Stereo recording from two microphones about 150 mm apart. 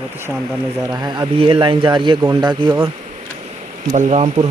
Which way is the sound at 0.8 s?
25° right (ahead or behind).